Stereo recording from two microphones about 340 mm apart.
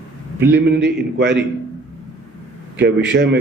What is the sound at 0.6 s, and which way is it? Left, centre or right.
Speech, right.